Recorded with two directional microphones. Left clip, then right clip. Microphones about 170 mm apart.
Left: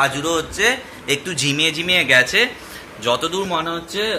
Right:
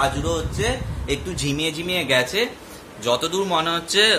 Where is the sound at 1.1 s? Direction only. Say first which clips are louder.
Left 5 dB; 10° right (ahead or behind).